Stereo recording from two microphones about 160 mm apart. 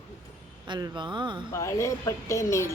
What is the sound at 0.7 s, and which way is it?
Speech, 30° right (ahead or behind).